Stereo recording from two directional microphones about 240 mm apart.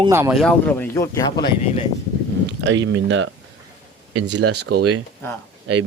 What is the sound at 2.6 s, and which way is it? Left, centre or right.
Speech, right.